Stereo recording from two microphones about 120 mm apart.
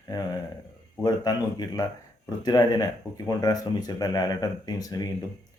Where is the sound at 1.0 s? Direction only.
30° left (ahead or behind).